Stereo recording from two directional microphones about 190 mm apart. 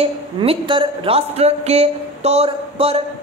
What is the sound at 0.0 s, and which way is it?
A man's voice, 30° right (ahead or behind).